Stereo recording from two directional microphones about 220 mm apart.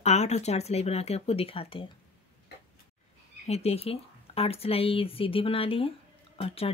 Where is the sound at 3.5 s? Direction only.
30° left (ahead or behind).